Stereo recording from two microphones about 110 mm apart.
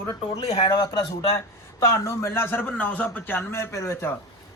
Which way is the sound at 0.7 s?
50° left (ahead or behind).